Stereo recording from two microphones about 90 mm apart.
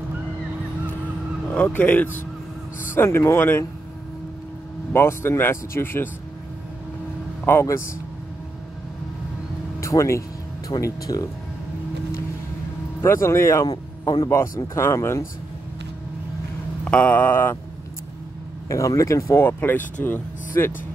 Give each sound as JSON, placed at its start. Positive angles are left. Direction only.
{"t": 1.5, "sound": "speech", "side_deg": 15}
{"t": 4.9, "sound": "speech", "side_deg": 30}
{"t": 7.6, "sound": "speech", "side_deg": 35}
{"t": 9.8, "sound": "speech", "side_deg": 35}
{"t": 13.0, "sound": "speech", "side_deg": 30}
{"t": 13.7, "sound": "a man's voice", "side_deg": 45}
{"t": 14.3, "sound": "speech", "side_deg": 30}
{"t": 16.8, "sound": "speech", "side_deg": 15}
{"t": 18.7, "sound": "speech", "side_deg": 35}